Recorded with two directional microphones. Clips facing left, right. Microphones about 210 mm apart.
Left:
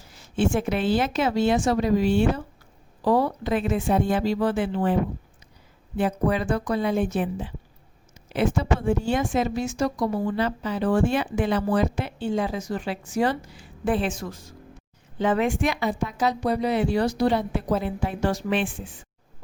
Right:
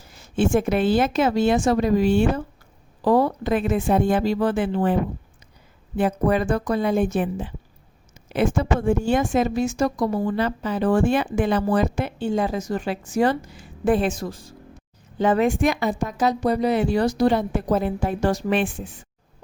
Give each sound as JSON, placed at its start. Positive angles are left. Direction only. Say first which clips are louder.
{"t": 0.3, "sound": "a woman's voice", "louder": "right 4 dB", "side_deg": -45}
{"t": 6.0, "sound": "a woman's voice", "louder": "right 3 dB", "side_deg": -50}